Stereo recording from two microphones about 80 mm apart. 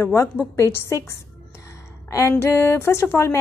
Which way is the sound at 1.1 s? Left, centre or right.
Left.